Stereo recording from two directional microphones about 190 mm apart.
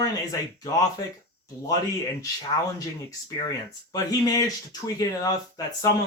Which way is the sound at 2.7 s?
20° left (ahead or behind).